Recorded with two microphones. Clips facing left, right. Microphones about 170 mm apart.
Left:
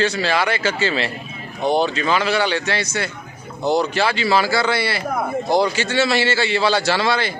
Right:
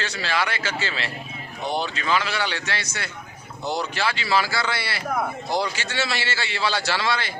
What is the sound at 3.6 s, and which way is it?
Speech, 55° left (ahead or behind).